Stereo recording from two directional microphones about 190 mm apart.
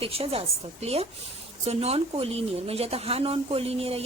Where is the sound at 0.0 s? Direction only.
30° right (ahead or behind).